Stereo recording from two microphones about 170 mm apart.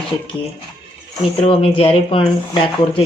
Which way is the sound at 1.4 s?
35° left (ahead or behind).